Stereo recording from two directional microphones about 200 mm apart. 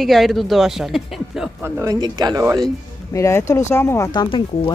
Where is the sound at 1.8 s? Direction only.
20° right (ahead or behind).